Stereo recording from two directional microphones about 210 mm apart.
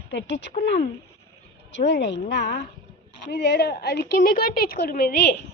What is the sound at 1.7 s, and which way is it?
A woman's voice, 55° left (ahead or behind).